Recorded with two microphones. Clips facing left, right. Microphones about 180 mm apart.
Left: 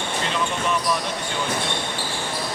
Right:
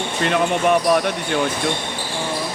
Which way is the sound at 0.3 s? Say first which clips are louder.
Right 9 dB; 60° right (ahead or behind).